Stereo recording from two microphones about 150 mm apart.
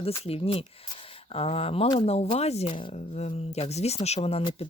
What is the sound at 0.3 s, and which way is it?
Speech, 40° left (ahead or behind).